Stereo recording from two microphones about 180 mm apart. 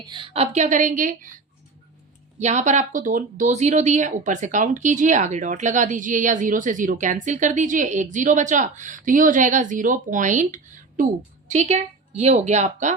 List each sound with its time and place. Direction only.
0.0 s a woman's voice: 25° right (ahead or behind)
0.5 s speech: 45° right (ahead or behind)
2.4 s a woman's voice: 40° right (ahead or behind)